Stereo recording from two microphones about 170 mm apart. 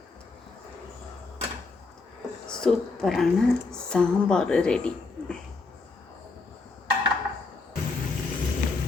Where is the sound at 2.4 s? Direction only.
5° left (ahead or behind).